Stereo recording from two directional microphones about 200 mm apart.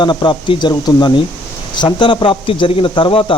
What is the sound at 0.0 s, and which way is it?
A man's voice, 25° left (ahead or behind).